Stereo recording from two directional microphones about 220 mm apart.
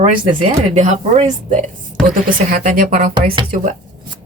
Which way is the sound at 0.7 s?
30° right (ahead or behind).